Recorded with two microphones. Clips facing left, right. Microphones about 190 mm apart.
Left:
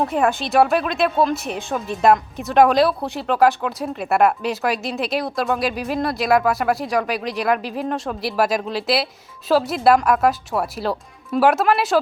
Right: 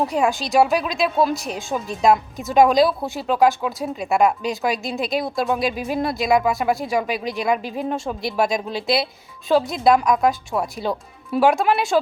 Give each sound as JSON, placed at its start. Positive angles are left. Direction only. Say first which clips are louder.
{"t": 0.0, "sound": "speech", "louder": "left 1 dB", "side_deg": 0}